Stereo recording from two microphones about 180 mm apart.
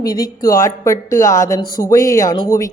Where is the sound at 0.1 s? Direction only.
20° left (ahead or behind).